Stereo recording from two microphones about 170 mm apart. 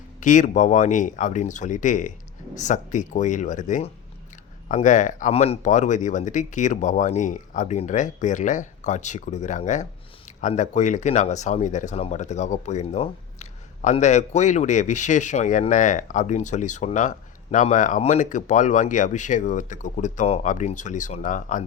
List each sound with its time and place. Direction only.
0.2 s speech: 45° left (ahead or behind)